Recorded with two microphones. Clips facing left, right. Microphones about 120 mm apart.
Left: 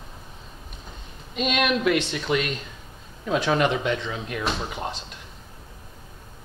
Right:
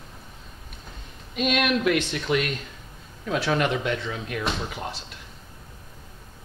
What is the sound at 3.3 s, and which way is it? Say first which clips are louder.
Speech: left 2 dB; 20° left (ahead or behind).